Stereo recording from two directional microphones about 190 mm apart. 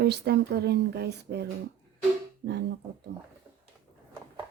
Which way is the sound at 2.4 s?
65° right (ahead or behind).